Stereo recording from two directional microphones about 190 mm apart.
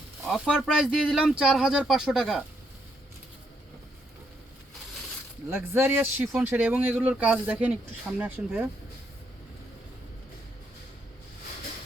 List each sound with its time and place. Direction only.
0.3 s speech: 5° right (ahead or behind)
5.5 s speech: 10° right (ahead or behind)